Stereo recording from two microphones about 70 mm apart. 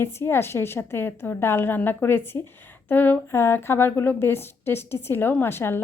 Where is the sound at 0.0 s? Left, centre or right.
Left.